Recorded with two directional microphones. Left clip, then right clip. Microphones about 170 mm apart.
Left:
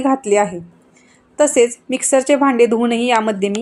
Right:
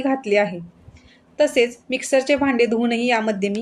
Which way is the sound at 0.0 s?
10° left (ahead or behind).